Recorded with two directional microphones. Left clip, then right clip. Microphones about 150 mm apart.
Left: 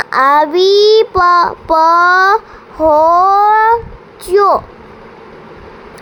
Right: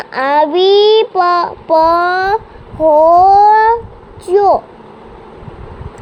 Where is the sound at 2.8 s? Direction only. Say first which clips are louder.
Right 1 dB; 30° left (ahead or behind).